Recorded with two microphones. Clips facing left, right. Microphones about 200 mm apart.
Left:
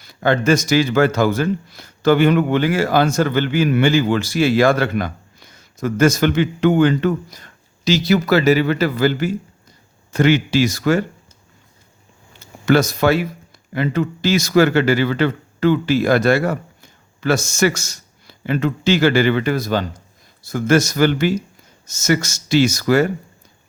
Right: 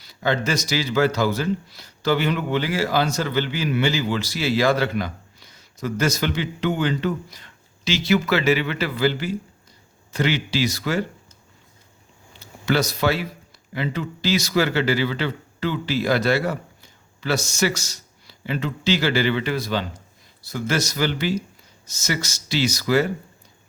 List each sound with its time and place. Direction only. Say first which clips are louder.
0.0 s speech: left 6 dB; 50° left (ahead or behind)
12.4 s speech: left 7 dB; 50° left (ahead or behind)